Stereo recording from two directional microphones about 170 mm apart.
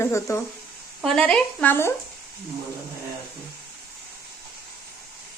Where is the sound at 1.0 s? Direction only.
5° left (ahead or behind).